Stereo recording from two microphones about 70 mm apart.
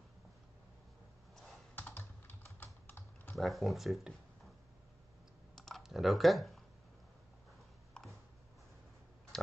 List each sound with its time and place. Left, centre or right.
1.8 s computer keyboard: left
2.6 s typing: left
3.3 s speech: centre
5.8 s speech: centre
8.0 s a sound: centre
9.3 s a sound: centre